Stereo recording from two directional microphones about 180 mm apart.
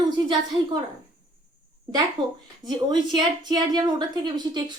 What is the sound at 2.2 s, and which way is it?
A woman's voice, 25° right (ahead or behind).